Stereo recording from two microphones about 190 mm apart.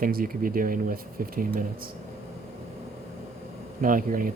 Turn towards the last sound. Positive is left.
turn(degrees=-45)  # may be behind; listen again after turning